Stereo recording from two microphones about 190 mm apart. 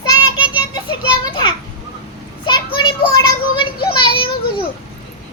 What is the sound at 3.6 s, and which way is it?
Speech, 25° left (ahead or behind).